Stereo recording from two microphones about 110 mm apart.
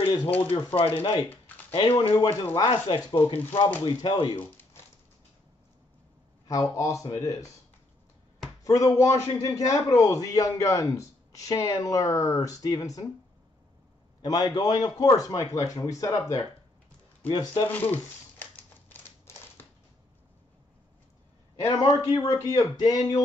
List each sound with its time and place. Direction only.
0.0 s speech: 45° left (ahead or behind)
0.7 s speech: 55° left (ahead or behind)
4.4 s a sound: 20° left (ahead or behind)
6.4 s speech: 30° left (ahead or behind)
8.6 s a man's voice: 30° left (ahead or behind)
14.2 s speech: 35° left (ahead or behind)
17.6 s speech: 15° left (ahead or behind)
21.9 s speech: 35° left (ahead or behind)